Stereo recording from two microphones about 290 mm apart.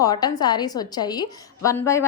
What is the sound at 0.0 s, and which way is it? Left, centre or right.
A woman's voice, centre.